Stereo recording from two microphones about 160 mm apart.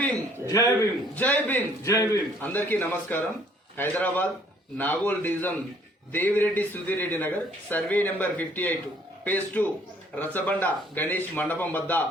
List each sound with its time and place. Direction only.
0.4 s a man's voice: 20° left (ahead or behind)
1.1 s speech: 10° left (ahead or behind)